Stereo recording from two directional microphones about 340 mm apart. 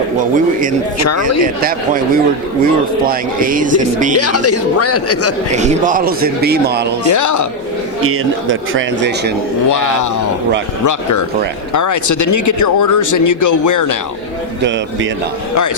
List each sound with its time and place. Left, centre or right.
0.9 s speech: left
3.1 s a man's voice: right
4.2 s speech: left
5.5 s a man's voice: centre
7.1 s speech: left
8.0 s speech: right
9.6 s speech: left
11.7 s speech: left